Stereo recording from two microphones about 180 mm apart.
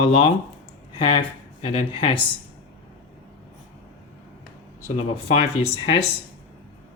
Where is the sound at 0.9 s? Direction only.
30° left (ahead or behind).